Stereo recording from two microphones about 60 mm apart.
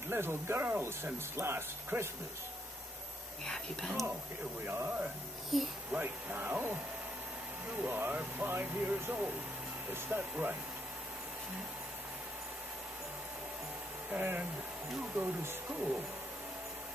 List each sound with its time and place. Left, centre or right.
0.1 s speech: right
3.4 s speech: centre
4.6 s speech: right
5.5 s a child's voice: centre
5.9 s speech: right
14.1 s speech: right